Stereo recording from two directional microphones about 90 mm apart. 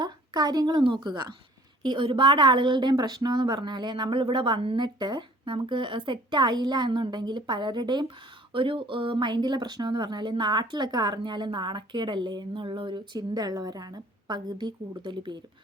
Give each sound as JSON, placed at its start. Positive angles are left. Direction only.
{"t": 0.0, "sound": "a woman's voice", "side_deg": -50}
{"t": 0.9, "sound": "speech", "side_deg": -60}
{"t": 4.8, "sound": "speech", "side_deg": -55}
{"t": 8.5, "sound": "speech", "side_deg": -70}